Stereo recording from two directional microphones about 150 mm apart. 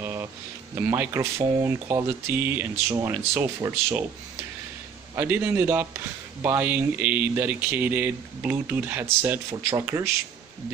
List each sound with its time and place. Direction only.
0.0 s a sound: 15° right (ahead or behind)
0.8 s speech: 20° right (ahead or behind)
5.1 s speech: 15° right (ahead or behind)